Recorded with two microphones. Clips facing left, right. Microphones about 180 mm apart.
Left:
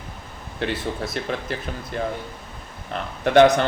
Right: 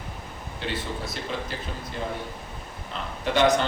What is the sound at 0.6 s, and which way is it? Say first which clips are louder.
Speech: left 5 dB; 60° left (ahead or behind).